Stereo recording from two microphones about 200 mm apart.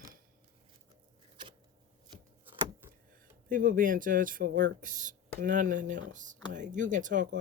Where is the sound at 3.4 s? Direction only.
45° right (ahead or behind).